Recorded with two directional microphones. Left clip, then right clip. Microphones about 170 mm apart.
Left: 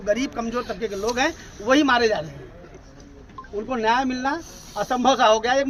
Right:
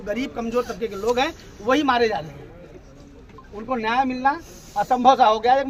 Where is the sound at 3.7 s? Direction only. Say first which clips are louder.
Even; 5° left (ahead or behind).